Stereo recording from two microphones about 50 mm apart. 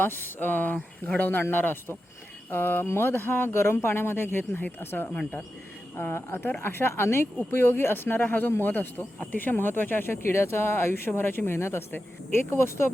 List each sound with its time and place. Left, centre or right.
0.0 s speech: left
1.4 s speech: left